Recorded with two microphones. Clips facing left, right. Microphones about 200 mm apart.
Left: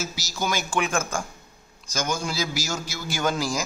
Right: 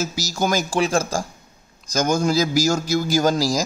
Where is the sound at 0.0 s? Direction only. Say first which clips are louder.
Right 6 dB; 45° right (ahead or behind).